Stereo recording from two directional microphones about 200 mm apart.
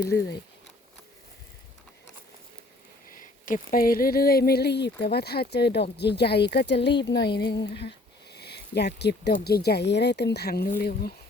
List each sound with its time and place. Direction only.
3.2 s speech: 40° left (ahead or behind); by 6.9 s 60° left (ahead or behind)
7.0 s a sound: 55° left (ahead or behind)
7.8 s speech: 55° left (ahead or behind)